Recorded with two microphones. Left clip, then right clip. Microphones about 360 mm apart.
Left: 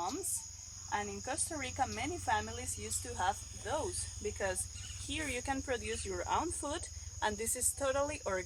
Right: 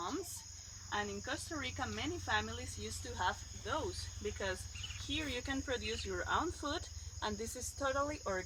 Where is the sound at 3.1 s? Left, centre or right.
Centre.